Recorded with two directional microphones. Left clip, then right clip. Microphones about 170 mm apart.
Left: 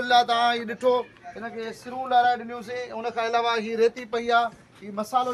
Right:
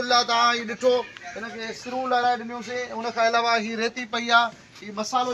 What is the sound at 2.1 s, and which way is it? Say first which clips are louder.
Speech: left 2 dB; 35° left (ahead or behind).